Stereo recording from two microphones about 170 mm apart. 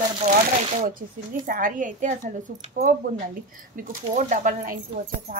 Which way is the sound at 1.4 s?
55° right (ahead or behind).